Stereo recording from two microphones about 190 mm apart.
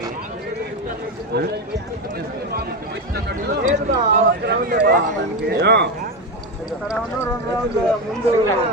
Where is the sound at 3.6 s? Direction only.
40° right (ahead or behind).